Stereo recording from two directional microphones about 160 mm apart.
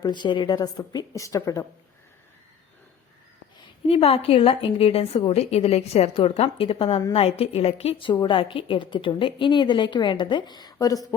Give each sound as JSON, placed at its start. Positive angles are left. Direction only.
{"t": 0.0, "sound": "a woman's voice", "side_deg": 30}
{"t": 3.8, "sound": "a woman's voice", "side_deg": 40}
{"t": 8.0, "sound": "a woman's voice", "side_deg": 30}